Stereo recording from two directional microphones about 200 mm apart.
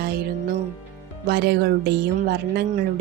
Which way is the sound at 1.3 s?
55° right (ahead or behind).